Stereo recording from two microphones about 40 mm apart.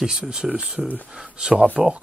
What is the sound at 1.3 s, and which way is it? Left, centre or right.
Speech, right.